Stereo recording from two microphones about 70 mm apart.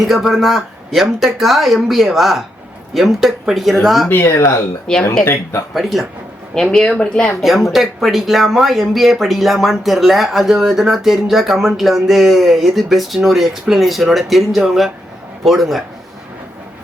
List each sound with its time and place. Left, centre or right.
0.0 s speech: centre
4.1 s speech: left
4.9 s speech: centre
5.2 s speech: left
5.7 s speech: centre
6.5 s speech: centre
7.4 s speech: centre